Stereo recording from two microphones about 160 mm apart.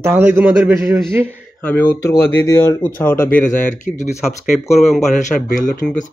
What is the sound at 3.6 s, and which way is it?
Speech, 50° left (ahead or behind).